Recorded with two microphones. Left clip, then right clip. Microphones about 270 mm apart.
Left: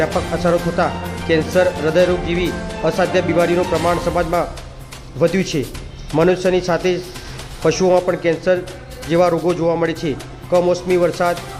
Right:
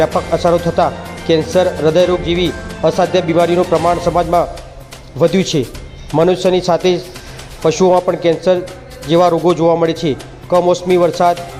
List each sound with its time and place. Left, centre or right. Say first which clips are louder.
0.0 s speech: right 5 dB; centre